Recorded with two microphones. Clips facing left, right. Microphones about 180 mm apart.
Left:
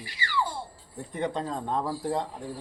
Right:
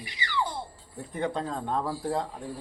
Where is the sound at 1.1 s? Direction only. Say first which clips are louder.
Even; centre (ahead or behind).